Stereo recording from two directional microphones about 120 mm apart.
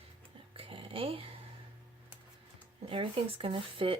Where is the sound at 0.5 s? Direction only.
50° right (ahead or behind).